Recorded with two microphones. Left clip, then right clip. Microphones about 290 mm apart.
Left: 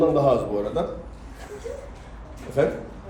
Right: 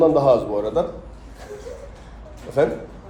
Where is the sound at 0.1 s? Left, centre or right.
Centre.